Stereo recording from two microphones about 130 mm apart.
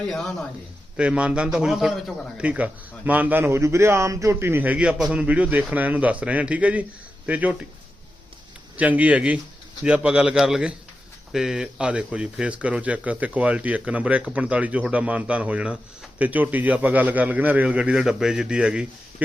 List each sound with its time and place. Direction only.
0.0 s a man's voice: 5° left (ahead or behind)
0.9 s a man's voice: 10° right (ahead or behind)
8.7 s speech: 10° right (ahead or behind)